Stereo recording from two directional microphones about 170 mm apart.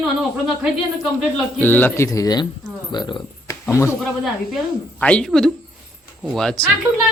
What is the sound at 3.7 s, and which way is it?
Speech, 15° left (ahead or behind).